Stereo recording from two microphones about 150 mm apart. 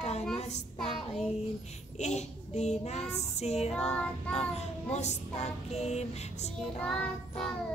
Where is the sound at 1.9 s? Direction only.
50° left (ahead or behind).